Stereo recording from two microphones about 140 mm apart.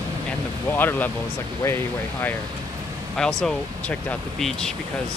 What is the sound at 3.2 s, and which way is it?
Speech, 5° left (ahead or behind).